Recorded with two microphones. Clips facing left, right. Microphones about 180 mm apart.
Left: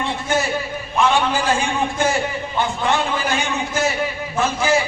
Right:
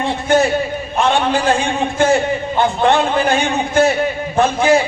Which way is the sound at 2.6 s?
55° right (ahead or behind).